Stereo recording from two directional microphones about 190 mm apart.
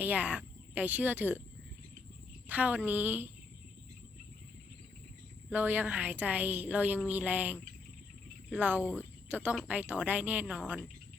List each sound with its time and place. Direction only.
0.0 s speech: 10° right (ahead or behind)
2.5 s speech: 10° right (ahead or behind)
5.5 s speech: 10° right (ahead or behind)
8.8 s speech: 10° left (ahead or behind)
9.3 s speech: 10° right (ahead or behind)